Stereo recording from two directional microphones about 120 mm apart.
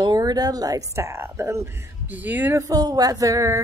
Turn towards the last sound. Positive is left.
turn(degrees=-25)  # may be behind; listen again after turning